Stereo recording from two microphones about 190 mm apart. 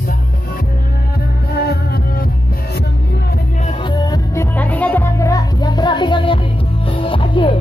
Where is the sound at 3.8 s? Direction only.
25° left (ahead or behind).